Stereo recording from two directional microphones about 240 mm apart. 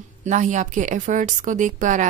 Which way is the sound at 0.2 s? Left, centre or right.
Right.